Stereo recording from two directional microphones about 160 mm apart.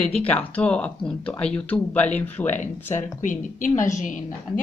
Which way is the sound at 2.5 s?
50° left (ahead or behind).